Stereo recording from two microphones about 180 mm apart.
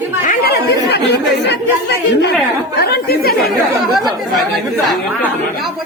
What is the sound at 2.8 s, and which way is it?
Speech, 60° left (ahead or behind).